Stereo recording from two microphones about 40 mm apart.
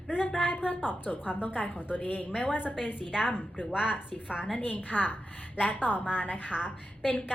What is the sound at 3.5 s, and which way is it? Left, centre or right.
Speech, centre.